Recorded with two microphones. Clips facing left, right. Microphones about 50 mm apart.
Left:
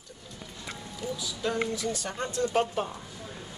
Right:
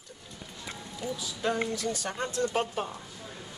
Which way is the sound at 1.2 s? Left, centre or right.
Right.